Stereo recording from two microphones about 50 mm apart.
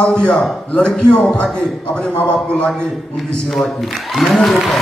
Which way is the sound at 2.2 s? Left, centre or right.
Centre.